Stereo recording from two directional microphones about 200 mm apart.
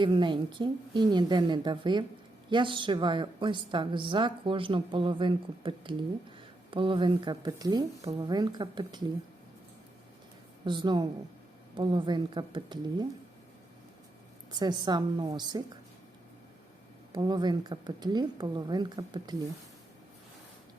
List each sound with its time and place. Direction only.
0.0 s a woman's voice: 25° right (ahead or behind)
10.7 s a woman's voice: 20° right (ahead or behind)
14.5 s a woman's voice: 20° right (ahead or behind)
17.1 s a woman's voice: 20° right (ahead or behind)